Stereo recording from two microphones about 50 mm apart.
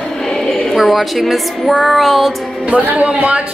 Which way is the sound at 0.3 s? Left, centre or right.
Centre.